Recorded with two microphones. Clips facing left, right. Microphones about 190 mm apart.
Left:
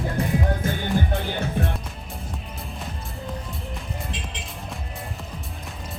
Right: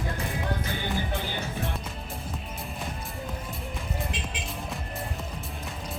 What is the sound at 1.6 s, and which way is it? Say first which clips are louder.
Music: left 7 dB; 60° left (ahead or behind).